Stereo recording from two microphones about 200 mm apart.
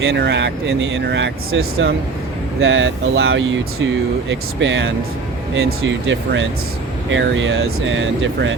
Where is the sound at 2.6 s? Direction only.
75° right (ahead or behind).